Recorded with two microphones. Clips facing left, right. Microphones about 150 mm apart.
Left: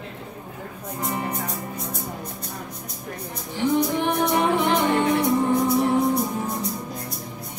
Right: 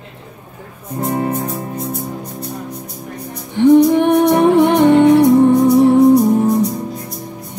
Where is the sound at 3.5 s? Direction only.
60° right (ahead or behind).